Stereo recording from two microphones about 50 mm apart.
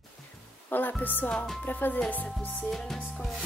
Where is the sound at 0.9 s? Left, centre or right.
Left.